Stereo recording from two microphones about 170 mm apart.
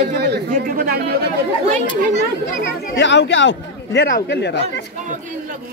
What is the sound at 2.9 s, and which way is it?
Speech, 90° left.